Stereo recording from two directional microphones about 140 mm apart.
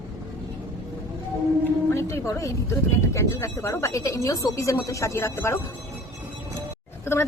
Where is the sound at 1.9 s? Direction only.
20° left (ahead or behind).